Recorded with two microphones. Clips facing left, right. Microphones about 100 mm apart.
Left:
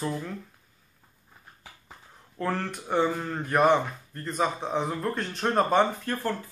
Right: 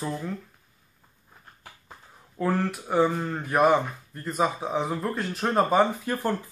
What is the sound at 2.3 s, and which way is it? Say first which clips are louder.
Speech: right 4 dB; 5° right (ahead or behind).